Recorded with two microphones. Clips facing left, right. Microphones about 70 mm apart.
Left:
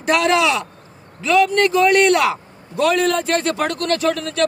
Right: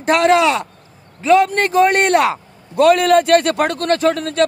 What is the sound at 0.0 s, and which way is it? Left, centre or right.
Speech, right.